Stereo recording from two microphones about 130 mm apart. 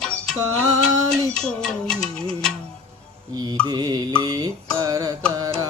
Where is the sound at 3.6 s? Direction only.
30° right (ahead or behind).